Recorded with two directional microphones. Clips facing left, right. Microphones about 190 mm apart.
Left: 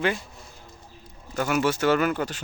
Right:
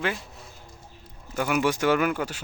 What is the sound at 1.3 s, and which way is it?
Speech, 10° right (ahead or behind).